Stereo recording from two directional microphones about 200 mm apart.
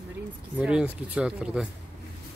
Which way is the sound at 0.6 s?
5° right (ahead or behind).